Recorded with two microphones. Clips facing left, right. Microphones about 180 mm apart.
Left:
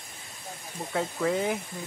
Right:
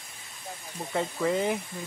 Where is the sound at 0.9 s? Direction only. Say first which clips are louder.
Even; centre (ahead or behind).